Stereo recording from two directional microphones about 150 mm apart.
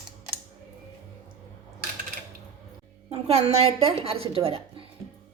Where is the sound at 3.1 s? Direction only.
45° right (ahead or behind).